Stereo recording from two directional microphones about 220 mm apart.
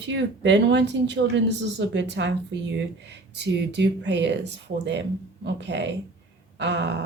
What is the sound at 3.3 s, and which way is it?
Speech, 50° right (ahead or behind).